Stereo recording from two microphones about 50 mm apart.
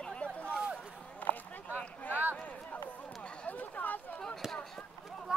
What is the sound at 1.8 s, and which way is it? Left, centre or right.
Speech, left.